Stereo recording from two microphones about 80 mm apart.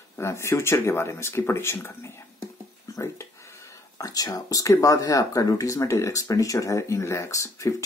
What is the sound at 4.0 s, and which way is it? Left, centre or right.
Speech, left.